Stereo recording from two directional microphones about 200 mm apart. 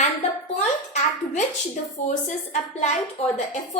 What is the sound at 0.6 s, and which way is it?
A woman's voice, 35° left (ahead or behind).